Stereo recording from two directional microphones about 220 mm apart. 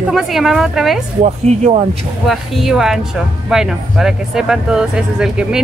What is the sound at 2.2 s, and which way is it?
Speech, centre (ahead or behind).